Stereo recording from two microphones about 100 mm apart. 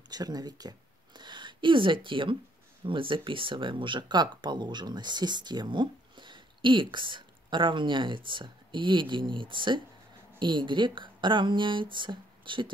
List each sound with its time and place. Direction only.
0.1 s speech: 40° right (ahead or behind)